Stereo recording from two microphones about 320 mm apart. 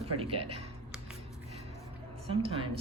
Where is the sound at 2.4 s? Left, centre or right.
Centre.